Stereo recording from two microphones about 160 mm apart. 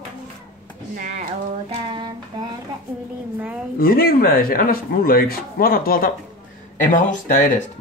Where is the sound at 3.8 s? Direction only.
65° left (ahead or behind).